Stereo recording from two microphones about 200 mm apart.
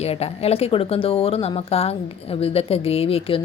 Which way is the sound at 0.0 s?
30° left (ahead or behind).